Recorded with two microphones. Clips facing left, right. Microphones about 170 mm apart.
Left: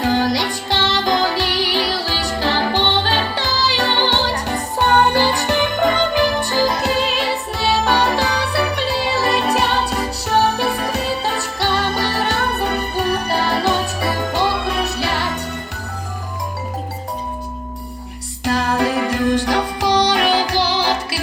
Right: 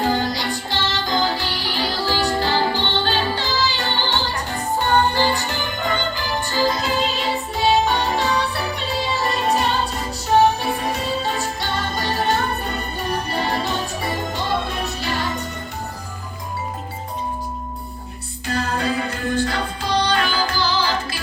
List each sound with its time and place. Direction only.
0.3 s music: 90° left
2.4 s music: 80° left
18.4 s music: 90° left